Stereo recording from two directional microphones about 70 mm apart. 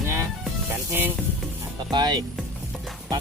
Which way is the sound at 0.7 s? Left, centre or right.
Right.